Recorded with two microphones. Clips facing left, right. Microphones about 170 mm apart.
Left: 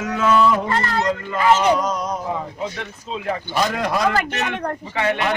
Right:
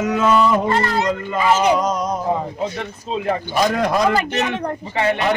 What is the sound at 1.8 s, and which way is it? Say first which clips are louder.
Speech: right 4 dB; 20° right (ahead or behind).